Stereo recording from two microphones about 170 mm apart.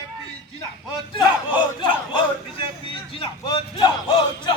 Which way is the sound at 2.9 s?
30° left (ahead or behind).